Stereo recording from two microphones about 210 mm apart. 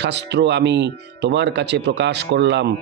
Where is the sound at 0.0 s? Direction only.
55° right (ahead or behind).